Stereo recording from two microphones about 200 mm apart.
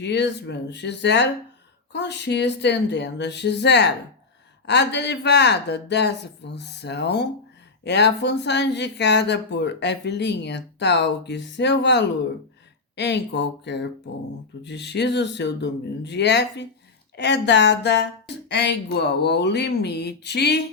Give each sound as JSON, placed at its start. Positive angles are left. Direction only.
{"t": 0.0, "sound": "speech", "side_deg": 60}